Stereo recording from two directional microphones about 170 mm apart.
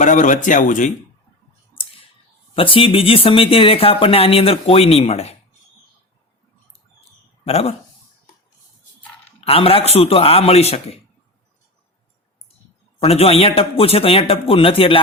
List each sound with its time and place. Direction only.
0.0 s speech: 45° left (ahead or behind)
1.7 s clicking: 30° left (ahead or behind)
2.6 s speech: 30° left (ahead or behind)
7.4 s speech: 35° left (ahead or behind)
9.4 s speech: 35° left (ahead or behind)
13.0 s speech: 35° left (ahead or behind)